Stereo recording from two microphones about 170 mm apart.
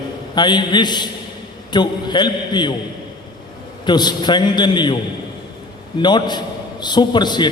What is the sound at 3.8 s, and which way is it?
A man's voice, 25° left (ahead or behind).